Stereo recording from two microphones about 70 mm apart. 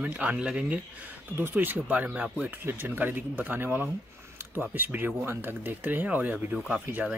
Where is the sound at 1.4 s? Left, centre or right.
Right.